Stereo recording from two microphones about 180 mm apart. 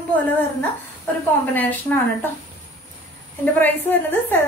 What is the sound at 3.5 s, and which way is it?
Speech, 10° left (ahead or behind).